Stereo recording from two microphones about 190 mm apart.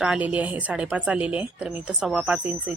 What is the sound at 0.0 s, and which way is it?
A woman's voice, 5° right (ahead or behind).